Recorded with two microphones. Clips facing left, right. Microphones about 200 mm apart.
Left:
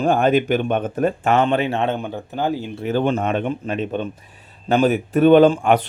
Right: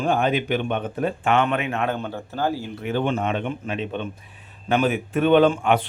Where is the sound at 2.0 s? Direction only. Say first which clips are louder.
Left 2 dB; 15° left (ahead or behind).